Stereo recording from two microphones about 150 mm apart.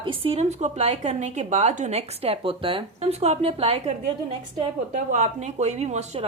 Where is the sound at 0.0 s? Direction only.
35° right (ahead or behind).